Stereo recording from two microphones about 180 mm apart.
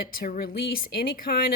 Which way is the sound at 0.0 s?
55° left (ahead or behind).